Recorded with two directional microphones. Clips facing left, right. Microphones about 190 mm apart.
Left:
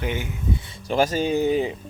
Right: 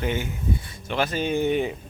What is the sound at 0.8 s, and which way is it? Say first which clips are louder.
Speech: left 4 dB; 40° left (ahead or behind).